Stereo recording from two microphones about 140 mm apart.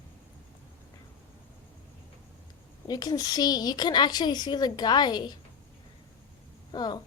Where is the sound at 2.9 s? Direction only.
30° left (ahead or behind).